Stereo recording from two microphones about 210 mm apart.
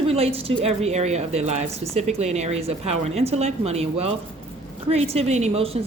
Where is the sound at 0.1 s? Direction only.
30° right (ahead or behind).